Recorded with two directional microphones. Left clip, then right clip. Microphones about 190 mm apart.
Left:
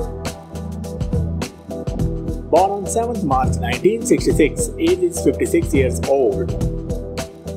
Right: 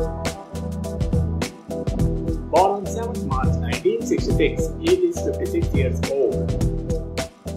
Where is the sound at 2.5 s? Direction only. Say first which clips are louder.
Left 3 dB; centre (ahead or behind).